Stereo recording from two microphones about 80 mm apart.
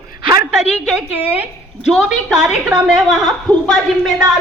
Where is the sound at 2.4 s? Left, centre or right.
Centre.